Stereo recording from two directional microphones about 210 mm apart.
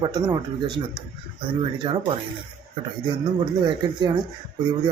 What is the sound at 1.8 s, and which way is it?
Speech, 20° right (ahead or behind).